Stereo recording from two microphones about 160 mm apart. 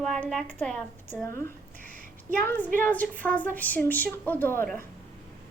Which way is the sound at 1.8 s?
55° right (ahead or behind).